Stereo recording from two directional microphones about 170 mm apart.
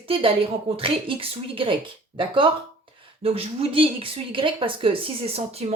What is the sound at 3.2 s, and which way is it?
A woman's voice, 35° right (ahead or behind).